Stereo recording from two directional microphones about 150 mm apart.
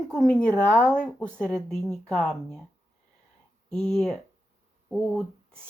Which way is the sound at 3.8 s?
5° left (ahead or behind).